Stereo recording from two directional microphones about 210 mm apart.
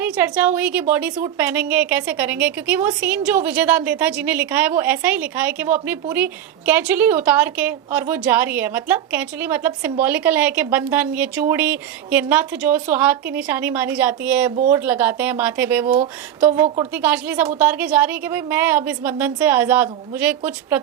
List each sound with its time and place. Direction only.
0.0 s a woman's voice: 10° right (ahead or behind)